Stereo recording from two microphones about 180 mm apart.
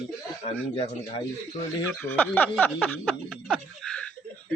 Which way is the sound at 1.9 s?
10° left (ahead or behind).